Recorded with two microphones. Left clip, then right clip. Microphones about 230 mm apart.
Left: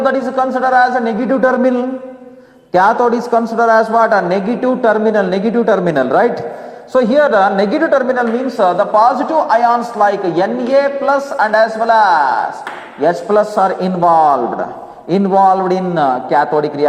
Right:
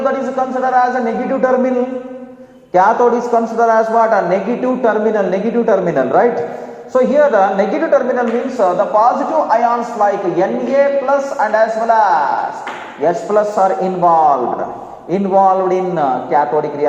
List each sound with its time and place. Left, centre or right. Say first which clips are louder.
0.3 s a man's voice: left 3 dB; left
2.7 s a man's voice: even; left